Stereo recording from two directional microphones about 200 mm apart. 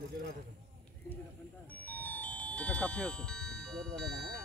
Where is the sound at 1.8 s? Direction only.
10° left (ahead or behind).